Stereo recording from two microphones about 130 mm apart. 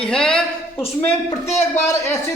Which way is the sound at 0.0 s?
5° left (ahead or behind).